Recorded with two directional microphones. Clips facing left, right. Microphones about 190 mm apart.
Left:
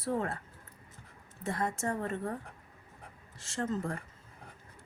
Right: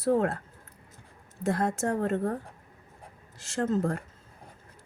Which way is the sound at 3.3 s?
70° right (ahead or behind).